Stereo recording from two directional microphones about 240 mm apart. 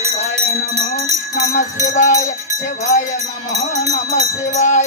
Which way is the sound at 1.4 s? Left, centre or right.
Left.